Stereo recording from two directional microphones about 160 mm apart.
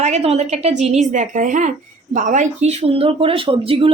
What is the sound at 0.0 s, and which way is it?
A woman's voice, 40° right (ahead or behind).